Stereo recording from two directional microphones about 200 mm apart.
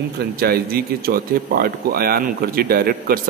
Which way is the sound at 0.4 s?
50° right (ahead or behind).